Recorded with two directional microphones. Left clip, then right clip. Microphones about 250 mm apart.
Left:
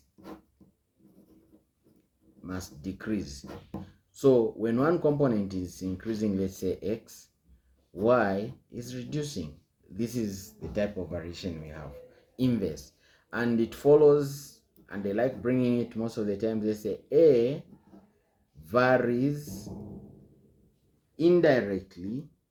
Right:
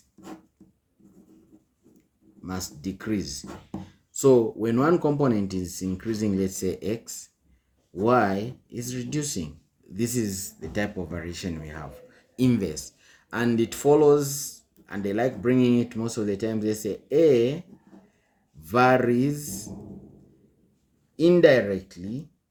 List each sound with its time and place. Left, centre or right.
2.4 s speech: right
18.6 s speech: right
21.2 s speech: right